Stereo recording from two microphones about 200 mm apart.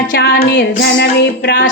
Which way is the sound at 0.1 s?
50° left (ahead or behind).